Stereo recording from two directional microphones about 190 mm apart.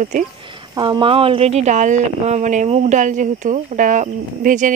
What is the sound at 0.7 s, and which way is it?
Speech, 25° right (ahead or behind).